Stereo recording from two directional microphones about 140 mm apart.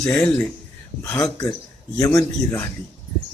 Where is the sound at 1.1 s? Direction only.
25° left (ahead or behind).